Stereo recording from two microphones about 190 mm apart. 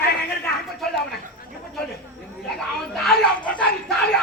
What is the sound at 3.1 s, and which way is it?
Dog, 5° left (ahead or behind).